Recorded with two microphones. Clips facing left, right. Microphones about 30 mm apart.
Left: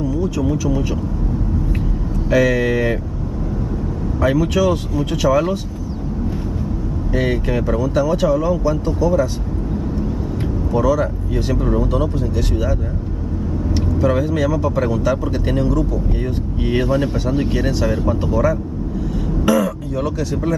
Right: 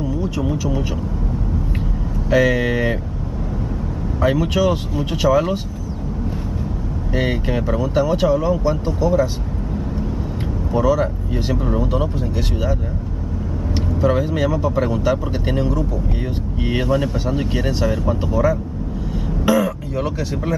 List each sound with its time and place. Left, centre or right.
0.0 s vehicle: right
0.5 s speech: centre
2.3 s speech: centre
4.2 s speech: centre
7.2 s speech: centre
7.8 s speech: centre
10.7 s speech: centre
13.7 s speech: centre
17.5 s speech: centre